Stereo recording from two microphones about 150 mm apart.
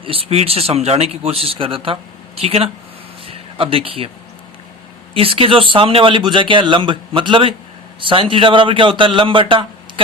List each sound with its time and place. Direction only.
0.0 s speech: 40° right (ahead or behind)
5.1 s speech: 40° right (ahead or behind)